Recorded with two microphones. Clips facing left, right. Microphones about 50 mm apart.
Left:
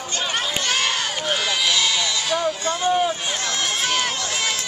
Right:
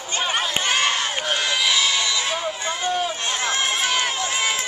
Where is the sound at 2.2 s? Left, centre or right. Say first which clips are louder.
Left 3 dB; right.